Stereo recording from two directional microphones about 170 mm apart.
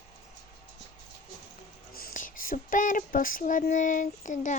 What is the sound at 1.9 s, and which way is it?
Child singing, 55° left (ahead or behind).